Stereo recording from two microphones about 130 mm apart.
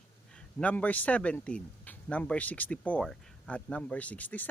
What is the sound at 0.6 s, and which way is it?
Speech, 10° left (ahead or behind).